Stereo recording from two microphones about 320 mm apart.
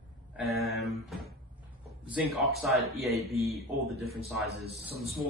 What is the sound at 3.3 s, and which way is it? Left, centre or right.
Speech, centre.